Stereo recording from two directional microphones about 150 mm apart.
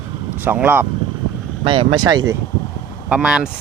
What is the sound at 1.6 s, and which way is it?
Speech, 35° right (ahead or behind).